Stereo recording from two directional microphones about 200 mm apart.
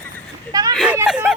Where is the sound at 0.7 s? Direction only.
Centre (ahead or behind).